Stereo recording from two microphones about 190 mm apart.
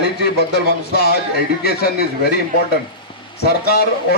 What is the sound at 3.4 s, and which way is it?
Speech, 55° left (ahead or behind).